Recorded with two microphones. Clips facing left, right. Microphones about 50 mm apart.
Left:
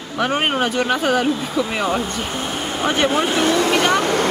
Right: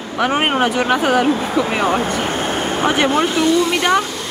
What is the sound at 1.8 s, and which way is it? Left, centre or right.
Speech, right.